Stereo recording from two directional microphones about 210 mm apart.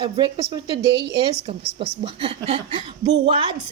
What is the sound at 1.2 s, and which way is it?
A woman's voice, 25° right (ahead or behind).